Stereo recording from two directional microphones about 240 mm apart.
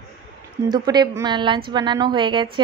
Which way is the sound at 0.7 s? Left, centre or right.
Centre.